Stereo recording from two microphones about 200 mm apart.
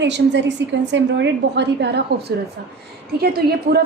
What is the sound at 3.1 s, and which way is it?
Speech, 50° right (ahead or behind).